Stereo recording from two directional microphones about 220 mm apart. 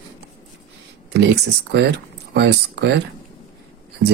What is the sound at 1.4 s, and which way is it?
Speech, 50° right (ahead or behind).